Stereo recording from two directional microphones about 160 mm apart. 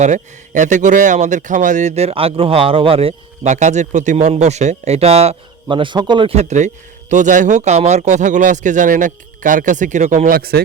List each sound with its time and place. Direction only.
0.0 s speech: 50° right (ahead or behind); by 6.3 s 30° right (ahead or behind)
6.3 s speech: 45° right (ahead or behind); by 10.6 s 70° right (ahead or behind)